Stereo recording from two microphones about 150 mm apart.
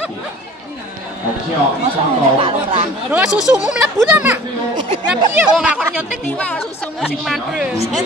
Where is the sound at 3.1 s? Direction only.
5° right (ahead or behind).